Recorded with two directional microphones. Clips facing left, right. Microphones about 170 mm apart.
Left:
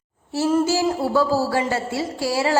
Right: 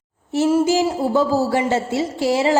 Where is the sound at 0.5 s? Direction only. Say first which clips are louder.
Even; 15° right (ahead or behind).